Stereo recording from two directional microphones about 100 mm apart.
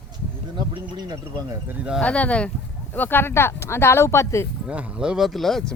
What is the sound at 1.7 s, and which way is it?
Speech, 15° right (ahead or behind).